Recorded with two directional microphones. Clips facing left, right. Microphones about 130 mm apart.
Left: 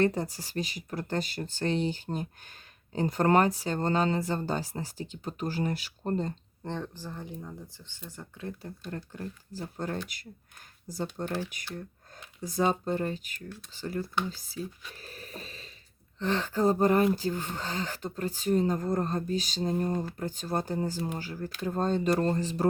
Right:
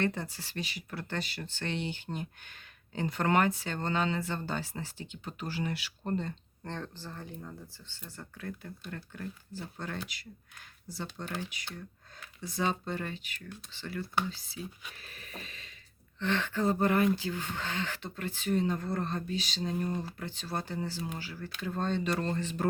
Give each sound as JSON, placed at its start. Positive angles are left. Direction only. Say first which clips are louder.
{"t": 0.0, "sound": "speech", "louder": "left 6 dB", "side_deg": 40}
{"t": 6.7, "sound": "speech", "louder": "left 4 dB", "side_deg": 15}
{"t": 14.9, "sound": "a sound", "louder": "left 4 dB", "side_deg": 40}
{"t": 16.1, "sound": "speech", "louder": "left 3 dB", "side_deg": 35}